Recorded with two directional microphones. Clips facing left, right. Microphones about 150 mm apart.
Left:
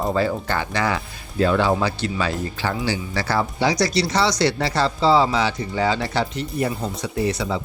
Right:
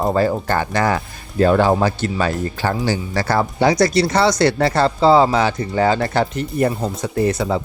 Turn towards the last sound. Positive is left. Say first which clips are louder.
# right 5 dB
turn(degrees=-50)  # may be behind; listen again after turning